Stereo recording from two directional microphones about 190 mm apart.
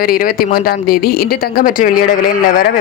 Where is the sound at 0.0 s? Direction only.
50° left (ahead or behind).